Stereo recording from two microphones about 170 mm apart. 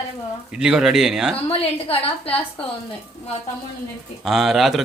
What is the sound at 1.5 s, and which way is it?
Speech, 35° left (ahead or behind).